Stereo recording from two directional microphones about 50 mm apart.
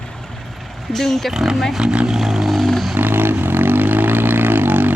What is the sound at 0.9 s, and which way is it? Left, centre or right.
Speech, centre.